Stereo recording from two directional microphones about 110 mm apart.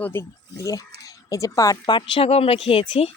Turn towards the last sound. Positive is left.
turn(degrees=65)  # may be behind; listen again after turning